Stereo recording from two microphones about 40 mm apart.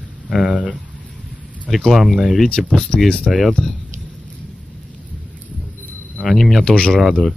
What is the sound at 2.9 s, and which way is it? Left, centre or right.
Speech, left.